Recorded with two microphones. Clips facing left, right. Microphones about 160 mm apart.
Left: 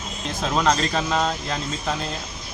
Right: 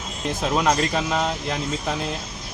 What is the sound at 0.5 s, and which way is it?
Speech, 15° right (ahead or behind).